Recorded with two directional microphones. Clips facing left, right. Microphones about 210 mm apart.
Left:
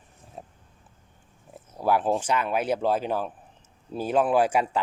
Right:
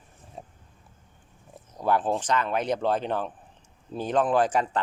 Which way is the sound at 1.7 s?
10° left (ahead or behind).